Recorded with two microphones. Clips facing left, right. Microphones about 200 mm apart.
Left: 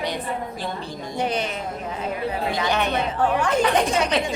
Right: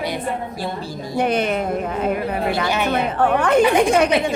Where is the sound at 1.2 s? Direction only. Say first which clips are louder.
Right 6 dB; 55° right (ahead or behind).